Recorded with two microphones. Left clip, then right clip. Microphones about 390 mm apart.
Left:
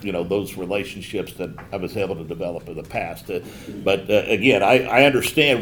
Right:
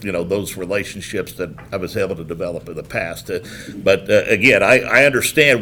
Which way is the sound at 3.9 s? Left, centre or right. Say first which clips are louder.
Right 3 dB; right.